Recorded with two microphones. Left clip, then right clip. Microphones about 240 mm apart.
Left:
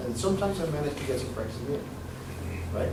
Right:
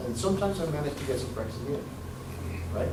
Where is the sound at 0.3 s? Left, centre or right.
Left.